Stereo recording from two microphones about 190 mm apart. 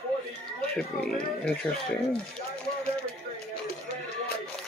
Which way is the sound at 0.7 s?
5° left (ahead or behind).